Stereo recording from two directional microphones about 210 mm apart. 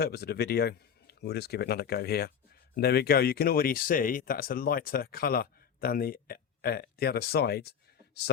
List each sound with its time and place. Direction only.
0.0 s speech: 50° left (ahead or behind)